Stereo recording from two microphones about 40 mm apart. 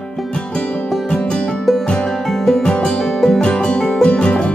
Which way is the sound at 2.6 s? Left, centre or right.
Left.